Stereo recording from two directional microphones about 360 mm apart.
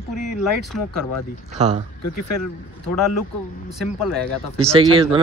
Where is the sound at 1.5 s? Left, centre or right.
Centre.